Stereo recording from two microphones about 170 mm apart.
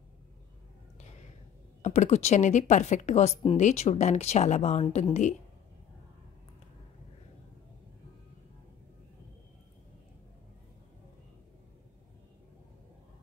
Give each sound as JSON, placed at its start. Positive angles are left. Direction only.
{"t": 1.8, "sound": "speech", "side_deg": 45}